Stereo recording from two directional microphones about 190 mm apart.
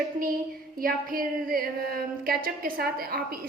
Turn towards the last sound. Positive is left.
turn(degrees=-50)  # may be behind; listen again after turning